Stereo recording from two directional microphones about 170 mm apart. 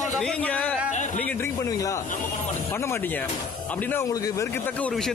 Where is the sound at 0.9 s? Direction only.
50° left (ahead or behind).